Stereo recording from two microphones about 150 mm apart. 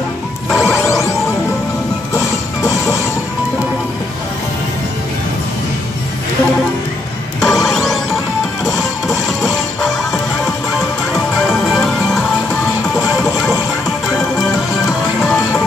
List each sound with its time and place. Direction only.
0.7 s music: 20° left (ahead or behind)
7.3 s music: centre (ahead or behind)
9.4 s music: centre (ahead or behind)